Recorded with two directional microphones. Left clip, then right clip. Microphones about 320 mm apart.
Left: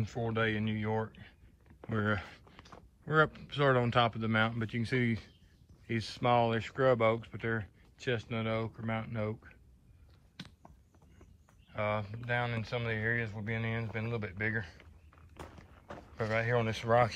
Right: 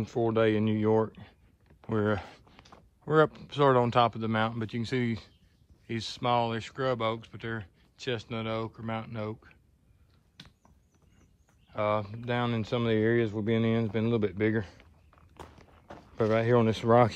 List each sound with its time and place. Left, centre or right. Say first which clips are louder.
0.0 s speech: right 7 dB; centre
11.7 s speech: right 5 dB; centre
15.3 s walk: right 1 dB; centre